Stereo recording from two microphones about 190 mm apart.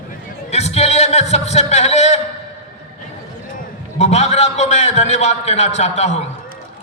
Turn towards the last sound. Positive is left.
turn(degrees=35)  # may be behind; listen again after turning